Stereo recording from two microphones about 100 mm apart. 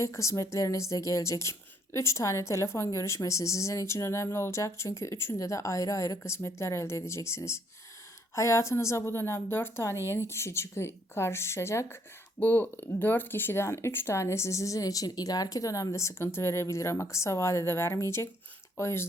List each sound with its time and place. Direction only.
0.0 s a woman's voice: 30° left (ahead or behind)